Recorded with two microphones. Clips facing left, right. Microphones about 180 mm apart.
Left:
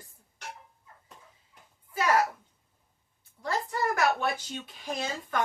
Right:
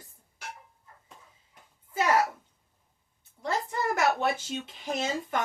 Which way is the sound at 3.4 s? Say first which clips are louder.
Even; 20° right (ahead or behind).